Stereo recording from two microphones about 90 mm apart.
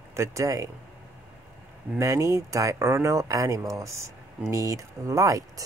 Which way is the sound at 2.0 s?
35° right (ahead or behind).